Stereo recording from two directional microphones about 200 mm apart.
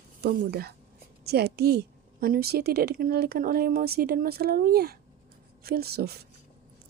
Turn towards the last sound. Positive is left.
turn(degrees=-55)  # may be behind; listen again after turning